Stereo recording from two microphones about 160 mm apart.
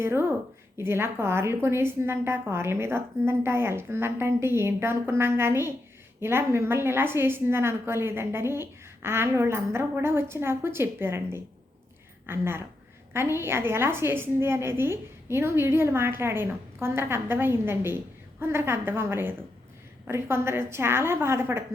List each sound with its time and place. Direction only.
0.0 s a woman's voice: 15° right (ahead or behind)